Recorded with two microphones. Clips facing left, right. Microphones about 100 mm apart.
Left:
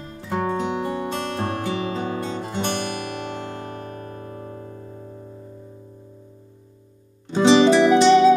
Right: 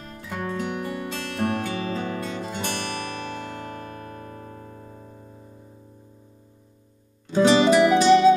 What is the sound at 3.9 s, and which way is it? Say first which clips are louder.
Music: left 3 dB; 35° left (ahead or behind).